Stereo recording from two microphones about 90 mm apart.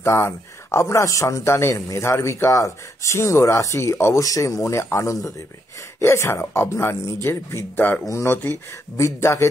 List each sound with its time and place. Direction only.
0.0 s a man's voice: 30° left (ahead or behind)